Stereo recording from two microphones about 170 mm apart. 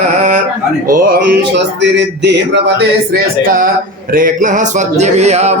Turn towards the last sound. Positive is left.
turn(degrees=-40)  # may be behind; listen again after turning